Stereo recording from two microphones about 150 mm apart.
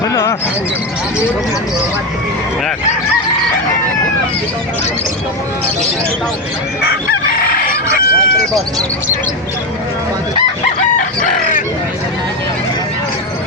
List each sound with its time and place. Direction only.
0.0 s speech: 20° left (ahead or behind)
7.3 s chicken: 80° left
10.9 s chicken: 60° left (ahead or behind)